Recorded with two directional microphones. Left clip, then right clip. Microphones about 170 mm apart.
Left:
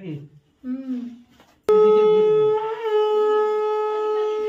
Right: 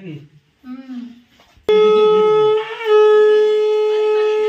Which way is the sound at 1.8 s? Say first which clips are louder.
Right 4 dB; 10° left (ahead or behind).